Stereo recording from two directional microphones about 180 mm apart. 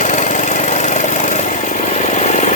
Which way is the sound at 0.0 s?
40° left (ahead or behind).